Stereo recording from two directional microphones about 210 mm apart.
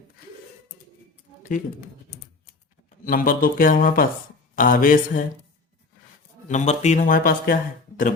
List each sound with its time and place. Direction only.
3.1 s speech: 40° left (ahead or behind)
6.5 s speech: 35° left (ahead or behind)